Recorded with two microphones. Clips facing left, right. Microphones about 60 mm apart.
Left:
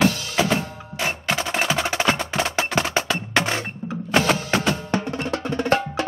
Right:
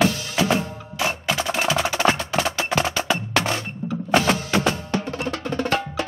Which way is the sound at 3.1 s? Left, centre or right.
Left.